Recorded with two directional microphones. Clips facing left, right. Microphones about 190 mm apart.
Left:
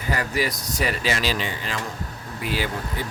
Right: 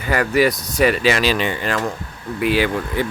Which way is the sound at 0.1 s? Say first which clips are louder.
Right 8 dB; 70° right (ahead or behind).